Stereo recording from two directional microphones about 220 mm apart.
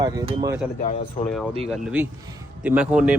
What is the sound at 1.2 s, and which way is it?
Speech, 35° left (ahead or behind).